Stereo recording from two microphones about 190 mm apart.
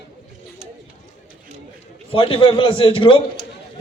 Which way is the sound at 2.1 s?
30° left (ahead or behind).